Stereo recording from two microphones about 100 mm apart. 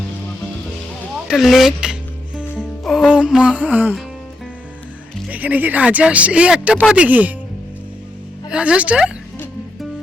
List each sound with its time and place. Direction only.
1.3 s music: centre (ahead or behind)
2.8 s speech: 5° right (ahead or behind)
5.3 s speech: 15° right (ahead or behind)
8.5 s speech: 10° right (ahead or behind)